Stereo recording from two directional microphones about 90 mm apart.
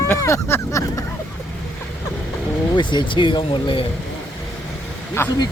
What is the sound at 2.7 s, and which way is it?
Speech, 60° left (ahead or behind).